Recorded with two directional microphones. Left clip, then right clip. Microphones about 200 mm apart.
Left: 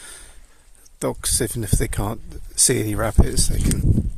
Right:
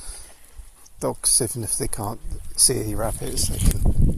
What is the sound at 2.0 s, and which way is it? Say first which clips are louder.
Speech: left 2 dB; 55° left (ahead or behind).